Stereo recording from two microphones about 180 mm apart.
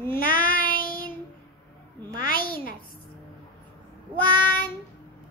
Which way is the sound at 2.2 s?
55° left (ahead or behind).